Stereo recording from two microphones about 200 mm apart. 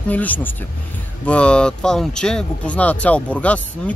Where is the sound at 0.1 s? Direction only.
10° left (ahead or behind).